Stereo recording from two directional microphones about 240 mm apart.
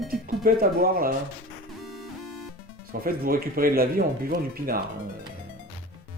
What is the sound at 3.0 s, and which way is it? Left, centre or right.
Speech, right.